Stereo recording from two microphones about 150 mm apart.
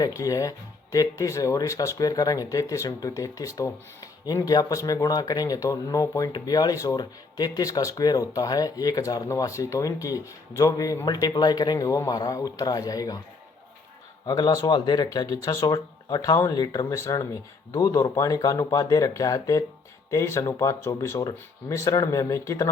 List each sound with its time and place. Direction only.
0.0 s speech: 20° left (ahead or behind)
14.3 s speech: 25° left (ahead or behind)